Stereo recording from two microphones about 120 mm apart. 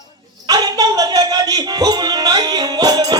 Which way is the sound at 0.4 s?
30° right (ahead or behind).